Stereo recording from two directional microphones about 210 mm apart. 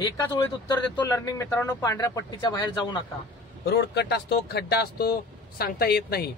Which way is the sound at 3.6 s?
50° left (ahead or behind).